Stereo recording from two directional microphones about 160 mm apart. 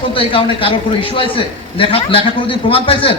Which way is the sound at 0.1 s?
35° left (ahead or behind).